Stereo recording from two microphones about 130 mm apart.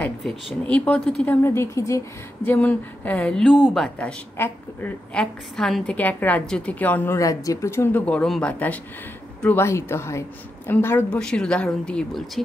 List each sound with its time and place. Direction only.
0.7 s a woman's voice: 10° left (ahead or behind)
1.2 s a woman's voice: 15° left (ahead or behind)
7.2 s a woman's voice: 25° left (ahead or behind)
11.1 s a woman's voice: 5° left (ahead or behind)